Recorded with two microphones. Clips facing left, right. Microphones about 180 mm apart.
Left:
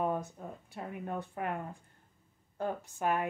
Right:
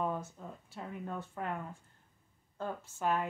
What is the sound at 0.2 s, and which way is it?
Speech, 15° left (ahead or behind).